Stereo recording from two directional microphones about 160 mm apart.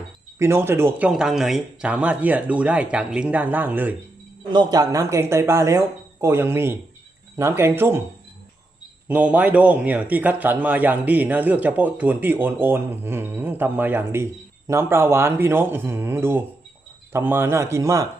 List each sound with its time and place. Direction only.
0.3 s a man's voice: 15° right (ahead or behind)
4.5 s a man's voice: 25° right (ahead or behind)
9.0 s a man's voice: 10° right (ahead or behind)